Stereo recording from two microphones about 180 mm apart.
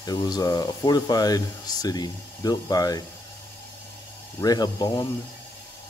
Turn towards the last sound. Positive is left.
turn(degrees=20)  # may be behind; listen again after turning